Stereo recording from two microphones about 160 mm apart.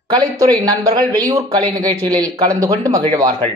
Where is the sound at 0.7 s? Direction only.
25° right (ahead or behind).